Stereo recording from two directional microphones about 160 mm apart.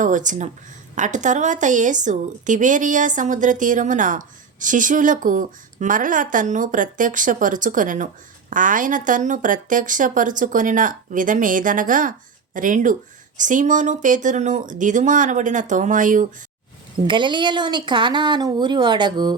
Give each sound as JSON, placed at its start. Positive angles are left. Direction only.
{"t": 0.0, "sound": "speech", "side_deg": -50}
{"t": 17.0, "sound": "speech", "side_deg": -30}